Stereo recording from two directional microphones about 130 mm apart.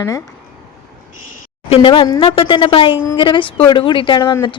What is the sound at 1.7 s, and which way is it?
A woman's voice, 40° left (ahead or behind).